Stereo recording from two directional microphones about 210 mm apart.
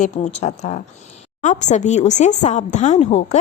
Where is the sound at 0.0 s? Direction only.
30° left (ahead or behind).